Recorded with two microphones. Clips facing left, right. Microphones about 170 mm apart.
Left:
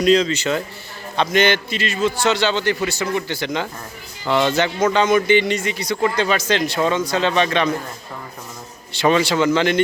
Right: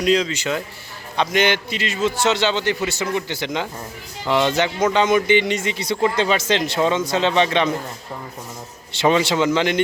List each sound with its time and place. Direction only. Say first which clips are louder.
0.0 s a man's voice: left 3 dB; 10° right (ahead or behind)
8.9 s a man's voice: left 1 dB; 20° right (ahead or behind)